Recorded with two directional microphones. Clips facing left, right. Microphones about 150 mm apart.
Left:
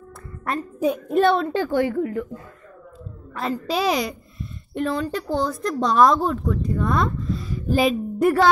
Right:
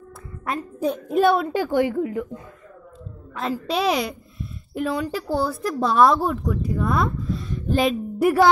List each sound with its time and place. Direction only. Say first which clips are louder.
0.7 s a child's voice: left 3 dB; 10° left (ahead or behind)
1.0 s a child's voice: right 1 dB; 5° right (ahead or behind)
3.3 s a child's voice: even; centre (ahead or behind)
8.2 s a child's voice: right 1 dB; 10° right (ahead or behind)